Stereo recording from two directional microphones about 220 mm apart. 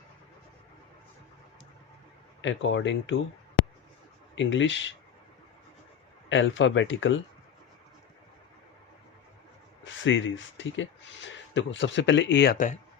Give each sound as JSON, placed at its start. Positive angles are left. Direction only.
{"t": 2.4, "sound": "speech", "side_deg": 55}
{"t": 4.4, "sound": "speech", "side_deg": 55}
{"t": 6.2, "sound": "speech", "side_deg": 60}
{"t": 9.8, "sound": "speech", "side_deg": 60}